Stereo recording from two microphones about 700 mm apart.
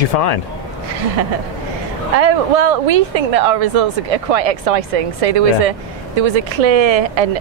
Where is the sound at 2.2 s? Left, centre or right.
Right.